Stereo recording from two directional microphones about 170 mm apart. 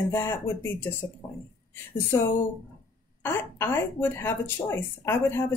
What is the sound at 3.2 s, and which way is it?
Speech, 15° left (ahead or behind).